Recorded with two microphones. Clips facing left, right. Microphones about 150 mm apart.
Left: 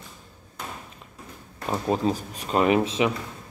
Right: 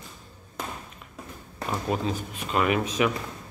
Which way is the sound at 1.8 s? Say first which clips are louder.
Left 5 dB; 35° left (ahead or behind).